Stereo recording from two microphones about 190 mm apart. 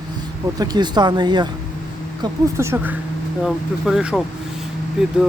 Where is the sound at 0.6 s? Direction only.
20° right (ahead or behind); by 4.2 s 5° right (ahead or behind).